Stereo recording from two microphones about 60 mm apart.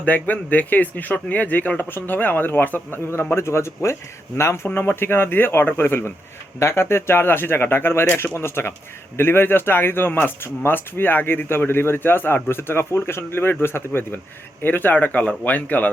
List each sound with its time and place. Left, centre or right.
0.0 s speech: left